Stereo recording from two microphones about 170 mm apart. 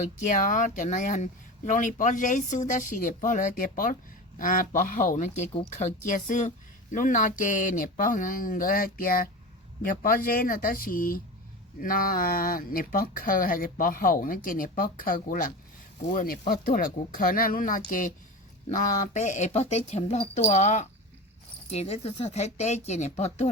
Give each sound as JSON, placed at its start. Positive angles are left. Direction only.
{"t": 0.0, "sound": "speech", "side_deg": 45}
{"t": 6.1, "sound": "speech", "side_deg": 50}